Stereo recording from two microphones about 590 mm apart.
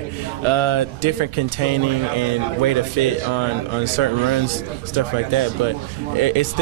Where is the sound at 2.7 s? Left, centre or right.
Right.